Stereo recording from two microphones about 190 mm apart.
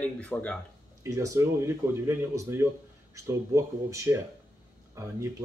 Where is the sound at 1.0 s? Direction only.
15° right (ahead or behind).